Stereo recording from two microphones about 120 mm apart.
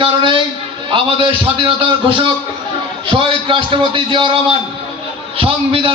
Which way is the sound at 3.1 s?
45° right (ahead or behind).